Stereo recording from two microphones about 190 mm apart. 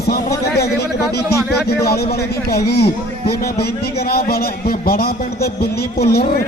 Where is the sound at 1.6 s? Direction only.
55° left (ahead or behind).